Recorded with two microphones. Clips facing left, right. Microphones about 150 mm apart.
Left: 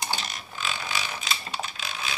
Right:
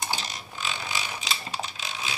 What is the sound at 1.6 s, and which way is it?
Typing, 20° right (ahead or behind).